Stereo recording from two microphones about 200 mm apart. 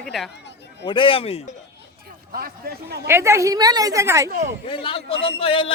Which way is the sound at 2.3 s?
50° right (ahead or behind).